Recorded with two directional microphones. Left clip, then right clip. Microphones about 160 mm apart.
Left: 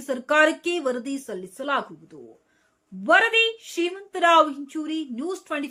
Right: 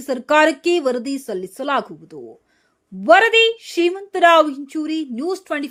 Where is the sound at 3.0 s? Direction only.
40° right (ahead or behind).